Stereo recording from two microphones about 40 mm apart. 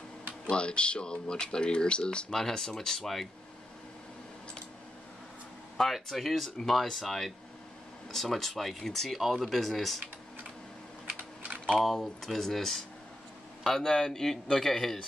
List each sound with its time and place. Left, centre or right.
0.5 s speech: left
2.3 s speech: centre
6.0 s speech: centre
11.1 s typing: right
11.8 s speech: centre